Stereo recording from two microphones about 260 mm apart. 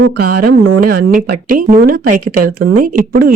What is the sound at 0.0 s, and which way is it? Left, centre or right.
Speech, right.